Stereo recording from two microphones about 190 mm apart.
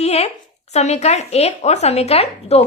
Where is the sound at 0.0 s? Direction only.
35° left (ahead or behind).